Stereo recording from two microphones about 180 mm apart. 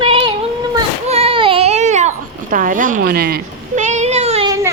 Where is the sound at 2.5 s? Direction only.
50° right (ahead or behind).